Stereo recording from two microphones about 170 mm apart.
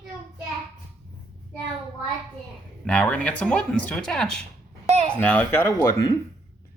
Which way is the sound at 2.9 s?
5° left (ahead or behind).